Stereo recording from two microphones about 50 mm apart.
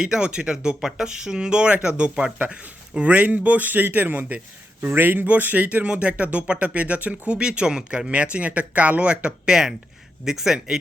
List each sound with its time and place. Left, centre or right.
0.0 s a man's voice: centre